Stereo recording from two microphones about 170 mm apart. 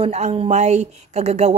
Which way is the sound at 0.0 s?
35° right (ahead or behind).